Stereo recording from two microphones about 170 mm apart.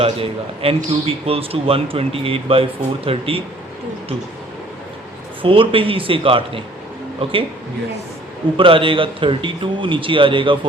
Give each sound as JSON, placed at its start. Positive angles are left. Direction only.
{"t": 0.0, "sound": "a man's voice", "side_deg": -35}
{"t": 5.4, "sound": "a man's voice", "side_deg": -30}
{"t": 8.5, "sound": "a man's voice", "side_deg": -30}